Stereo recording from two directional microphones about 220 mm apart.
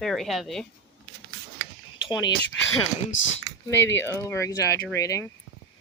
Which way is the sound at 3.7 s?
10° left (ahead or behind).